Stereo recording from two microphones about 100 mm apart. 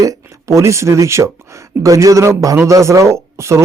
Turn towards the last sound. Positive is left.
turn(degrees=-30)  # may be behind; listen again after turning